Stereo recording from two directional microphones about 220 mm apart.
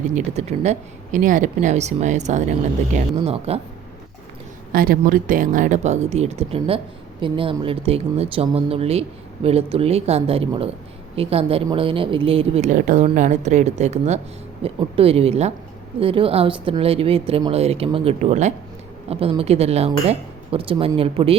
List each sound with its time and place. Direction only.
0.1 s speech: 30° right (ahead or behind)
4.7 s speech: 40° right (ahead or behind); by 21.3 s 25° right (ahead or behind)